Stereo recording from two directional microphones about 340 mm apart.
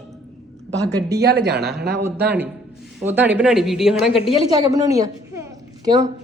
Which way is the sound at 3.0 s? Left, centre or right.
Centre.